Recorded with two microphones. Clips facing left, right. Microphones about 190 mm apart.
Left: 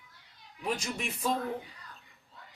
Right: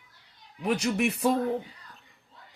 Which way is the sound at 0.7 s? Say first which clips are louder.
Right 11 dB; 65° right (ahead or behind).